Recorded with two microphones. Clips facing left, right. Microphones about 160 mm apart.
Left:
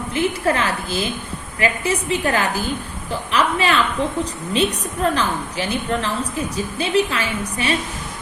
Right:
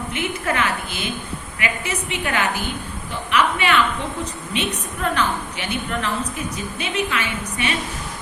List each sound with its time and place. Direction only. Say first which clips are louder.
0.1 s a woman's voice: left 6 dB; 35° left (ahead or behind)